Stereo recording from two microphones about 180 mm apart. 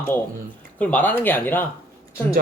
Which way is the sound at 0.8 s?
10° left (ahead or behind).